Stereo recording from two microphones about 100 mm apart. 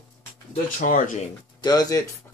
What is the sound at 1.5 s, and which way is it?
Speech, 40° left (ahead or behind).